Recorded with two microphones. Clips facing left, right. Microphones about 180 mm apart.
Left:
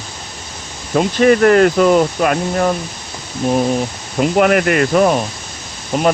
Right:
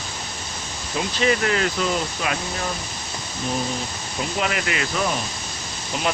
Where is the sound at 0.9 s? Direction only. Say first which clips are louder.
Left 10 dB; 55° left (ahead or behind).